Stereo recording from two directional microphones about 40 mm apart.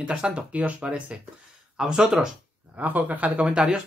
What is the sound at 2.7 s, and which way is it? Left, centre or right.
Speech, right.